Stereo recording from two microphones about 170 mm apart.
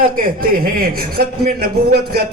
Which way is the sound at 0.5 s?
60° right (ahead or behind).